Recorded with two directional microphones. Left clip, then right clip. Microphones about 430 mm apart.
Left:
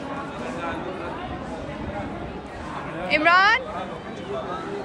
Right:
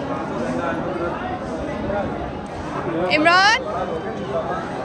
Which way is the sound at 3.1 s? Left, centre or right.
Centre.